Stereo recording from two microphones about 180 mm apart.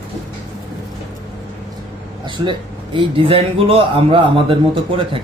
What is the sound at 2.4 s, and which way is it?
A man's voice, 25° right (ahead or behind).